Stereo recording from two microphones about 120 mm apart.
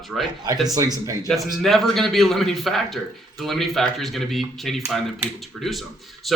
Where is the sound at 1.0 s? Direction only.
30° right (ahead or behind).